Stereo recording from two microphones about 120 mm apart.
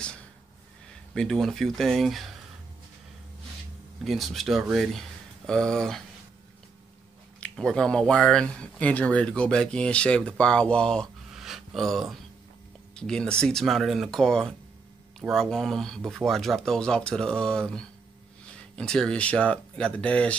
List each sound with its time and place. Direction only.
1.1 s speech: 5° left (ahead or behind)
4.0 s speech: centre (ahead or behind)
7.3 s speech: 10° left (ahead or behind)
11.3 s a sound: 5° right (ahead or behind)
12.9 s speech: 5° left (ahead or behind)